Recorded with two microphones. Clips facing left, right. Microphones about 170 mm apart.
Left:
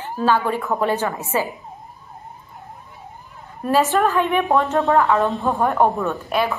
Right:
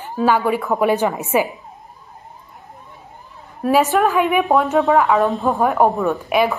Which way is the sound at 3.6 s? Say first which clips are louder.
Right 2 dB; 10° right (ahead or behind).